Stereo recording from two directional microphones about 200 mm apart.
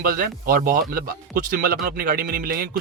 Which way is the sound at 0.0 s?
45° right (ahead or behind).